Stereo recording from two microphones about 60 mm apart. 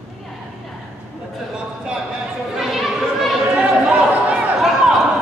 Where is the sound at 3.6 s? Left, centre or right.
Centre.